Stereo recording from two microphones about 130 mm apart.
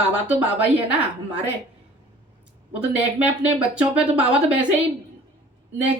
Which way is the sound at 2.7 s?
10° right (ahead or behind).